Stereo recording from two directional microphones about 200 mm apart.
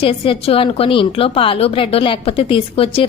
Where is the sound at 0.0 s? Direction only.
25° left (ahead or behind).